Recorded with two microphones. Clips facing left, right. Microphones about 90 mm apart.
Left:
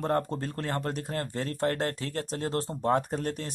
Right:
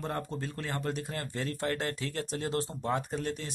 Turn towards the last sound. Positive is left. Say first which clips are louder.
# left 3 dB
turn(degrees=50)  # may be behind; listen again after turning